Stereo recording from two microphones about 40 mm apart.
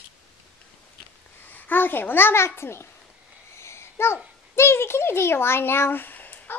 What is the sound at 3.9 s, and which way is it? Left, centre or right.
A child's voice, left.